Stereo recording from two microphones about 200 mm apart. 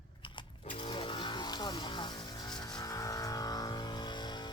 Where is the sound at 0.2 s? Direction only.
25° left (ahead or behind).